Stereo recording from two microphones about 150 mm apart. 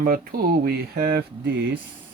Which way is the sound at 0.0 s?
75° right (ahead or behind).